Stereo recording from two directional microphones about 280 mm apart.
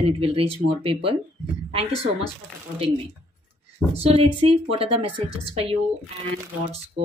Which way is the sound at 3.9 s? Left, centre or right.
Right.